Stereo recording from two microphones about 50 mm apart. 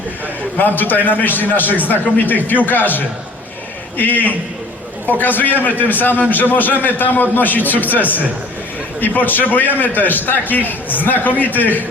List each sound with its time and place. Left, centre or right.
0.6 s a man's voice: left